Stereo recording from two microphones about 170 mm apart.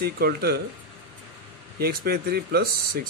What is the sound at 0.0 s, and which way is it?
Speech, 65° right (ahead or behind).